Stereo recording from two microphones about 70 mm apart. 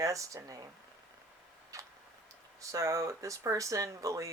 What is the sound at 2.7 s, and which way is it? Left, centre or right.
Speech, right.